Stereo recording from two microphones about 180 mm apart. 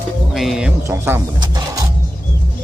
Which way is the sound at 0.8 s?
15° right (ahead or behind).